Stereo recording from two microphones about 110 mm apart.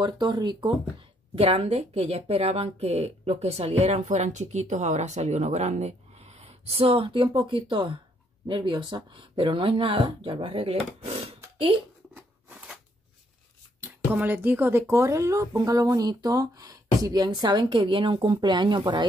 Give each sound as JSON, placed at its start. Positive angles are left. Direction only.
{"t": 0.0, "sound": "speech", "side_deg": -40}
{"t": 1.3, "sound": "speech", "side_deg": -65}
{"t": 11.5, "sound": "a sound", "side_deg": -55}
{"t": 12.1, "sound": "biting", "side_deg": -20}
{"t": 13.7, "sound": "speech", "side_deg": -15}